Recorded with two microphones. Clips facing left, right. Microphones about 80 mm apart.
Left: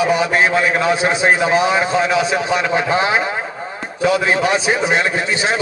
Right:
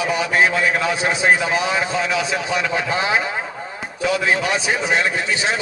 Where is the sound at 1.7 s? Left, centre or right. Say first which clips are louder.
Left 5 dB; left.